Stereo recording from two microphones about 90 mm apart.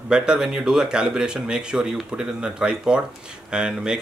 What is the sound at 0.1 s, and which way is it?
Speech, 10° right (ahead or behind).